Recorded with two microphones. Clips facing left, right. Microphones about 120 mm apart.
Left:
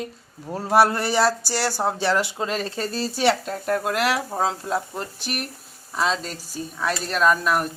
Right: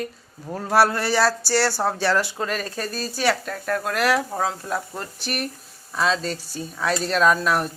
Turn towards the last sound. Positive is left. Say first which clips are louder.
# right 1 dB
turn(degrees=5)  # may be behind; listen again after turning